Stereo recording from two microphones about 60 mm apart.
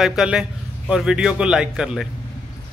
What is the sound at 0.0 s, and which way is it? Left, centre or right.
A man's voice, centre.